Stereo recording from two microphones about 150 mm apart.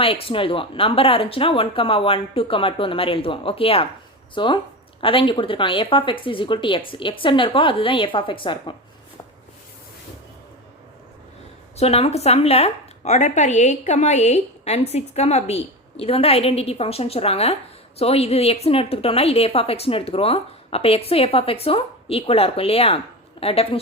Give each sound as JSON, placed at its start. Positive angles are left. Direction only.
{"t": 0.0, "sound": "a woman's voice", "side_deg": 40}
{"t": 11.8, "sound": "a woman's voice", "side_deg": 40}